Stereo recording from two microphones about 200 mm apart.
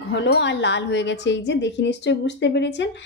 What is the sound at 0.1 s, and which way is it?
A woman's voice, 65° left (ahead or behind).